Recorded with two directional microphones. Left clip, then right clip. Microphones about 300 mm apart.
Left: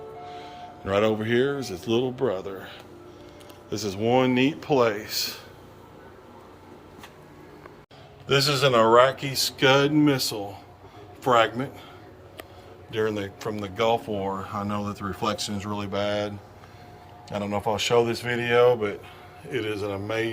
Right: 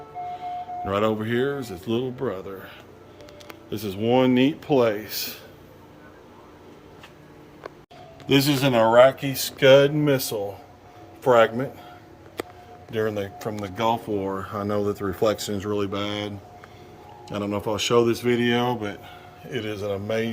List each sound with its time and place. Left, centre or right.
0.3 s speech: centre
8.3 s speech: centre
12.9 s speech: centre
14.3 s speech: left
14.7 s speech: centre
15.0 s speech: left
15.4 s speech: centre